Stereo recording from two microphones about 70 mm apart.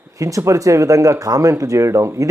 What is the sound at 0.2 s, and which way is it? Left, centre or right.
Speech, right.